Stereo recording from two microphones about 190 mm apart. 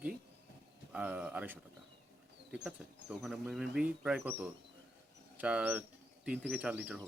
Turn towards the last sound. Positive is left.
turn(degrees=-5)  # may be behind; listen again after turning